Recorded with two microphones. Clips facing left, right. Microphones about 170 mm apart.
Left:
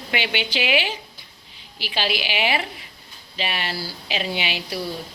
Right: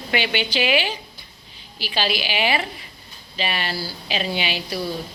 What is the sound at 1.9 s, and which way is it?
Speech, 20° left (ahead or behind).